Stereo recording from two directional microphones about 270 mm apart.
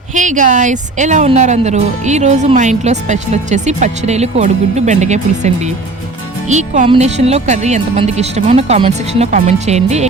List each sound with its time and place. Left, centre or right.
0.1 s speech: right
6.5 s speech: right